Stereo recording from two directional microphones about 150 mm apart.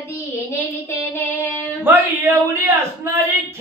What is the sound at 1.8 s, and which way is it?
A man's voice, 15° right (ahead or behind).